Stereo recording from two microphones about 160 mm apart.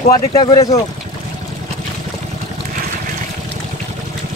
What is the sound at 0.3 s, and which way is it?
Speech, 25° left (ahead or behind).